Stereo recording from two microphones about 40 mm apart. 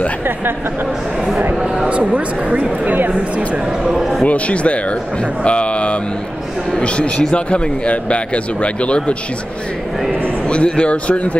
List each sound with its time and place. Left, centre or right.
1.9 s speech: right
3.8 s a man's voice: centre
4.3 s speech: left
10.5 s speech: left